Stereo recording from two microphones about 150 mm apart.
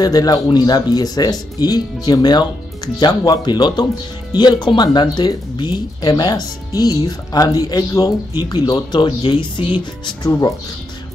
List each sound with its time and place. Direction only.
0.0 s speech: 25° left (ahead or behind)